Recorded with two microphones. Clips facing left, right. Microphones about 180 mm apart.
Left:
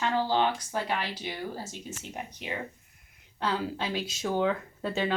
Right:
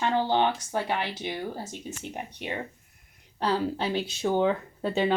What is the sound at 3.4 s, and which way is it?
Speech, 35° right (ahead or behind).